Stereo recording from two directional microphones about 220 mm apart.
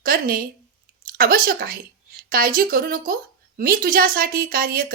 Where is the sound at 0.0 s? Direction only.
40° right (ahead or behind).